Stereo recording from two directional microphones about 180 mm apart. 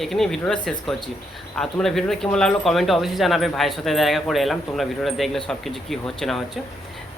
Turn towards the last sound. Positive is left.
turn(degrees=0)  # may be behind; listen again after turning